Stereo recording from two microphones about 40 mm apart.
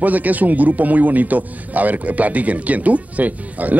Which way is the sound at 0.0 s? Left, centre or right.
Right.